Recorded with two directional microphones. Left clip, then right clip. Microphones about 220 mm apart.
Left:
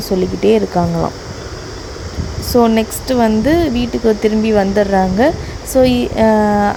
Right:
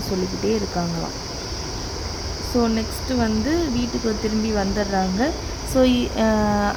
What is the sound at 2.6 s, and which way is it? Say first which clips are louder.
A woman's voice: left 10 dB; 25° left (ahead or behind).